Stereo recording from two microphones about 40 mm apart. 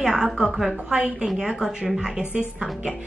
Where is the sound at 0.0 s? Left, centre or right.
Centre.